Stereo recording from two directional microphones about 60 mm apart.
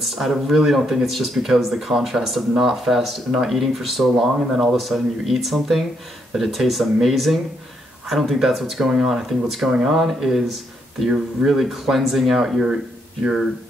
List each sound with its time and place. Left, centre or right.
0.0 s speech: centre